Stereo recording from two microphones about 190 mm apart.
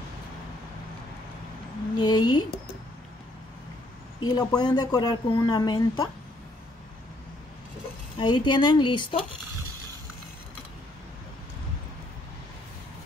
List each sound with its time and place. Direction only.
2.0 s a woman's voice: 25° left (ahead or behind)
4.3 s a woman's voice: 20° left (ahead or behind)
8.2 s a woman's voice: 25° left (ahead or behind)